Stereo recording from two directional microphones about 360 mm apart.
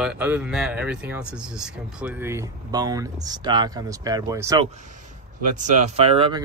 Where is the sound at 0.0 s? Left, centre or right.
Centre.